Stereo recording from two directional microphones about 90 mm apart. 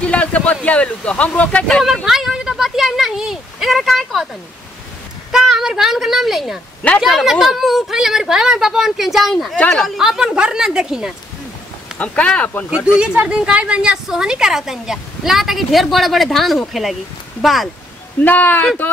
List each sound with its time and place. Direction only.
0.0 s speech: 15° left (ahead or behind)
2.0 s a sound: 5° right (ahead or behind)
5.3 s a child's voice: 5° right (ahead or behind)
9.9 s a woman's voice: 5° right (ahead or behind)
12.0 s speech: 15° left (ahead or behind)
12.6 s a woman's voice: 10° right (ahead or behind)
18.2 s speech: 20° left (ahead or behind)